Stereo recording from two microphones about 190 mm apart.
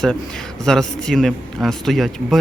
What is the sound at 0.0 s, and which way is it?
Speech, centre (ahead or behind).